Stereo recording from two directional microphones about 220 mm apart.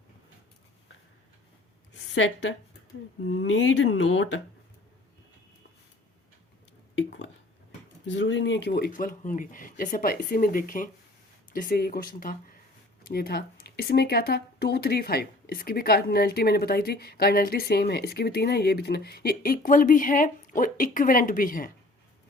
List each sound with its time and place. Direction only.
1.9 s a woman's voice: 55° left (ahead or behind)
6.9 s speech: 55° left (ahead or behind); by 21.7 s 40° left (ahead or behind)